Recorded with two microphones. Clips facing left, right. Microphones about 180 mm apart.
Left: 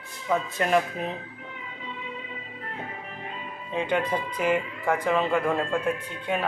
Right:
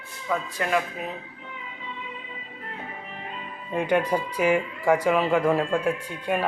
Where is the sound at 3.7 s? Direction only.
10° right (ahead or behind).